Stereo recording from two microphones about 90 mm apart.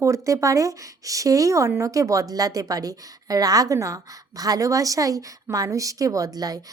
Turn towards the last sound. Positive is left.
turn(degrees=-45)  # may be behind; listen again after turning